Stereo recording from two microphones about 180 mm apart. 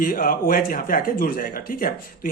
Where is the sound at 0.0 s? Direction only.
50° left (ahead or behind).